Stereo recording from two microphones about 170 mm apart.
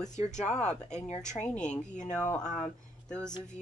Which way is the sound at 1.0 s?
40° left (ahead or behind).